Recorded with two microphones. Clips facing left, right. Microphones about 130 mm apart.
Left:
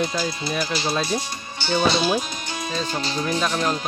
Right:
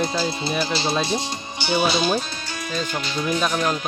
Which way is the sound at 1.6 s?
10° right (ahead or behind).